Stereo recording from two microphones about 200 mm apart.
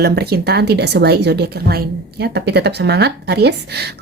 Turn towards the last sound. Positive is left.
turn(degrees=-55)  # may be behind; listen again after turning